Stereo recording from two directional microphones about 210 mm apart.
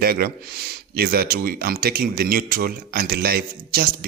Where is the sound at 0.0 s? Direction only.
45° right (ahead or behind).